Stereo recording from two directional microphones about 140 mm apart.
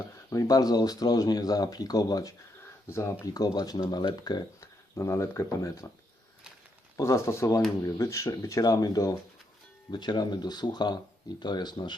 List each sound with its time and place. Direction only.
0.3 s speech: 25° left (ahead or behind)
6.9 s speech: 20° left (ahead or behind)